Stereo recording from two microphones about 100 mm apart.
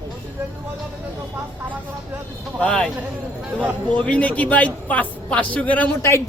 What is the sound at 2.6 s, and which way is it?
Speech, 5° left (ahead or behind).